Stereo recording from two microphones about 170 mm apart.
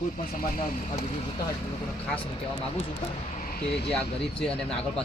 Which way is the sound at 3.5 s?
70° left (ahead or behind).